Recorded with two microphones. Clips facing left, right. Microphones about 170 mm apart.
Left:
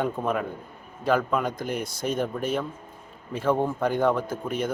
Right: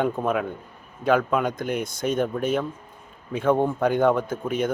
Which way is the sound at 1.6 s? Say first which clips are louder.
Right 3 dB; 55° right (ahead or behind).